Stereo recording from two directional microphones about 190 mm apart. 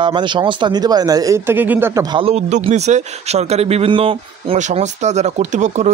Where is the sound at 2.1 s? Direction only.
30° right (ahead or behind).